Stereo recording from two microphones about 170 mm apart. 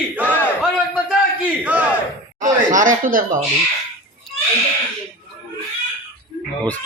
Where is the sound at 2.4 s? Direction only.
50° right (ahead or behind).